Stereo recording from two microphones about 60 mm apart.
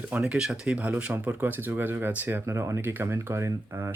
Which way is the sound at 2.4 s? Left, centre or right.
Right.